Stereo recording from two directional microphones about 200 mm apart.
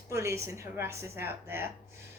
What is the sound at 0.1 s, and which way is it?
A woman's voice, 15° right (ahead or behind).